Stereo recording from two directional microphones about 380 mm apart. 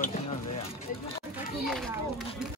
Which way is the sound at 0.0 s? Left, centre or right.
Centre.